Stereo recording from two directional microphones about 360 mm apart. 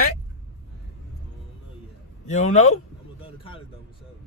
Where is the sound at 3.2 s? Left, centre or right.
Centre.